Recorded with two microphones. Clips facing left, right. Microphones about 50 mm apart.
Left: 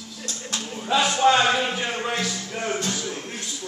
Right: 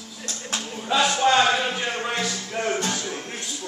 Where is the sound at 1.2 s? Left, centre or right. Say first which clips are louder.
Left 2 dB; centre.